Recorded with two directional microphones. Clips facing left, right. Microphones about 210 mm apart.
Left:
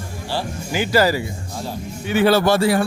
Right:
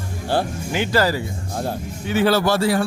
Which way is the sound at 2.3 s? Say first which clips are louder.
Left 3 dB; 20° left (ahead or behind).